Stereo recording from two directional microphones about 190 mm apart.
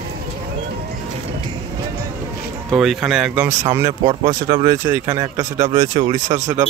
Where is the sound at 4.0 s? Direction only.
25° right (ahead or behind).